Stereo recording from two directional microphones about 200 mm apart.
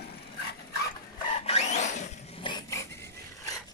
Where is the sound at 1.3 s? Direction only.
30° left (ahead or behind).